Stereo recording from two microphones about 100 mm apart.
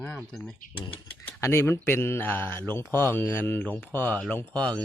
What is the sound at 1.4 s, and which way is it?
Speech, 25° left (ahead or behind).